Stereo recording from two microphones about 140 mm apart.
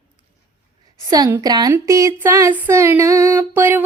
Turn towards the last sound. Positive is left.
turn(degrees=-15)  # may be behind; listen again after turning